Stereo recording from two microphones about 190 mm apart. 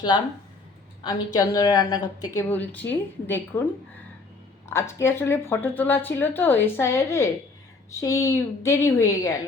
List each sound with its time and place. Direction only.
0.1 s a woman's voice: 25° left (ahead or behind)
4.7 s speech: 15° left (ahead or behind)